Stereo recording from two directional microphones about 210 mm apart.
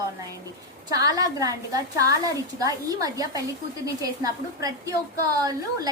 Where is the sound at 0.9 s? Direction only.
15° right (ahead or behind).